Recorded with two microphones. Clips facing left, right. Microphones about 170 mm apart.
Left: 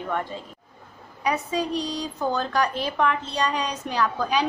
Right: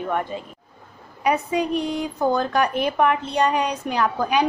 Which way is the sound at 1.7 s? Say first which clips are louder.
Right 4 dB; 55° right (ahead or behind).